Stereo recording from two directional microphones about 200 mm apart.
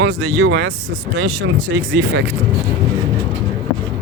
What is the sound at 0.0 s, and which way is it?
Speech, 65° right (ahead or behind).